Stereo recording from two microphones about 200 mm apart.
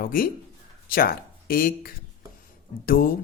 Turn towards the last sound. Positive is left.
turn(degrees=45)  # may be behind; listen again after turning